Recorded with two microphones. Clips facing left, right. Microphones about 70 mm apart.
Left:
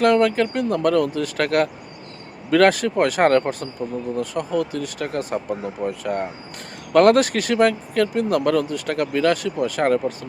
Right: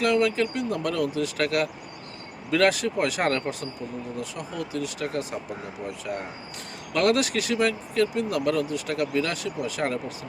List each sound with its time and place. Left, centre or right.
0.0 s speech: left